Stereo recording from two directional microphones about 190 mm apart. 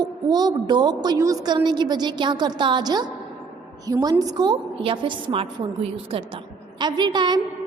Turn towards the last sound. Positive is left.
turn(degrees=-25)  # may be behind; listen again after turning